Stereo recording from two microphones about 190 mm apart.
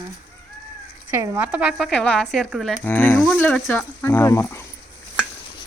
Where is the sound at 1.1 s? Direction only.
15° right (ahead or behind); by 4.5 s 15° left (ahead or behind).